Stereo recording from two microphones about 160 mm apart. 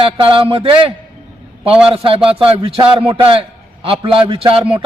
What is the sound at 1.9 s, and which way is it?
A man's voice, 35° right (ahead or behind).